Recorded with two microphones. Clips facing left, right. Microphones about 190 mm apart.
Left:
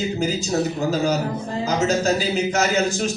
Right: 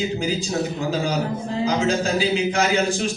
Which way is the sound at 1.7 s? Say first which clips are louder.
Left 2 dB; 45° left (ahead or behind).